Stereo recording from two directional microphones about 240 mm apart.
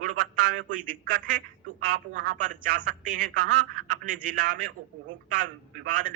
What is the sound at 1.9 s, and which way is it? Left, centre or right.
A man's voice, right.